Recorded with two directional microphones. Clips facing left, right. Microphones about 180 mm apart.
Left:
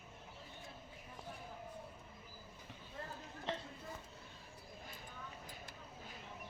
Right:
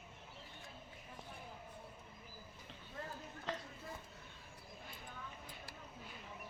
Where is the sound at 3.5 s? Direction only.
25° left (ahead or behind).